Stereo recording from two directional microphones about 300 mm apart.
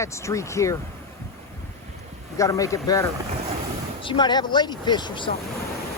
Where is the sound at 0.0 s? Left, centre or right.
Centre.